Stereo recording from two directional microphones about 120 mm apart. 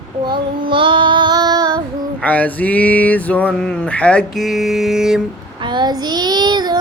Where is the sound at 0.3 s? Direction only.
45° right (ahead or behind).